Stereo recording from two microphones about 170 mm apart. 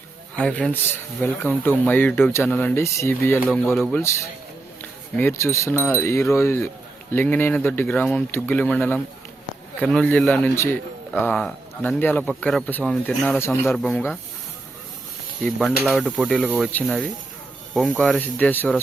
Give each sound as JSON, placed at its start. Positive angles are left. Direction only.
{"t": 0.3, "sound": "speech", "side_deg": 5}
{"t": 4.8, "sound": "speech", "side_deg": 10}
{"t": 15.4, "sound": "speech", "side_deg": 0}